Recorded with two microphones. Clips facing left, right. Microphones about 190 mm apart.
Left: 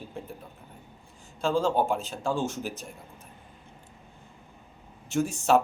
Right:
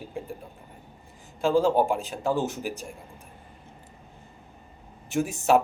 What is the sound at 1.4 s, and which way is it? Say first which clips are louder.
Speech: right 4 dB; 15° right (ahead or behind).